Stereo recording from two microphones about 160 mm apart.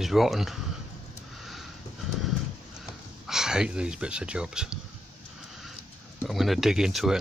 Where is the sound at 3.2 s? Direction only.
5° right (ahead or behind).